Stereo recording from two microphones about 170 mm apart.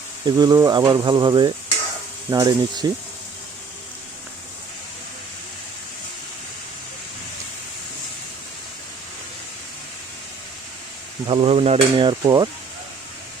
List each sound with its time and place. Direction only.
0.3 s speech: 25° right (ahead or behind)
11.3 s a sound: 35° right (ahead or behind)
12.2 s speech: 20° right (ahead or behind)